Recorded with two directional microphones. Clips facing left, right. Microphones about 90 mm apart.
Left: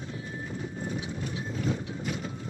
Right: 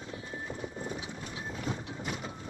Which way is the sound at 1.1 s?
35° right (ahead or behind).